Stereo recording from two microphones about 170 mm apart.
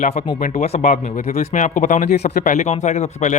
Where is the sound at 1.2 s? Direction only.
55° left (ahead or behind).